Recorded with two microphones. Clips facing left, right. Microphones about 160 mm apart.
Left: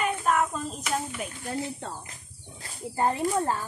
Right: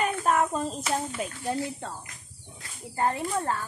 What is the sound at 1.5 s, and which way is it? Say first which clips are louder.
Snake: even; 25° left (ahead or behind).